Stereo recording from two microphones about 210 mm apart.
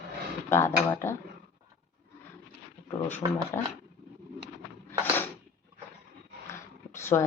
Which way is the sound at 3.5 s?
10° left (ahead or behind).